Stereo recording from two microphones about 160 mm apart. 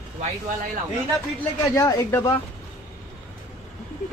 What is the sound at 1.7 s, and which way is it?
Speech, 20° left (ahead or behind).